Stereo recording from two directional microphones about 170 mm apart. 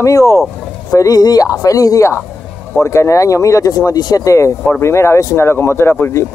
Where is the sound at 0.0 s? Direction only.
20° left (ahead or behind).